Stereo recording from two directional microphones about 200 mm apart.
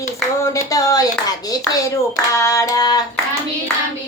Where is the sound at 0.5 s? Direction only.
15° left (ahead or behind).